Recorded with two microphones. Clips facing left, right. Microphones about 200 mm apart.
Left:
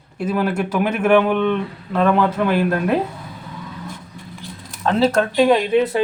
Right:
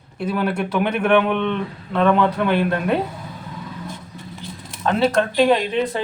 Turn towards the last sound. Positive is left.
turn(degrees=5)  # may be behind; listen again after turning